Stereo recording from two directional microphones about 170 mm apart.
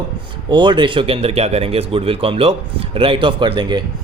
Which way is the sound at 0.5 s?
30° right (ahead or behind).